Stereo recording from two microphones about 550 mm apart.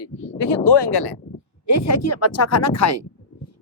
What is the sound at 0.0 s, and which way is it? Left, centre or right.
Speech, left.